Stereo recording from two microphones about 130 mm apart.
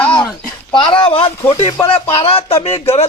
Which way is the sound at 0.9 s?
45° left (ahead or behind).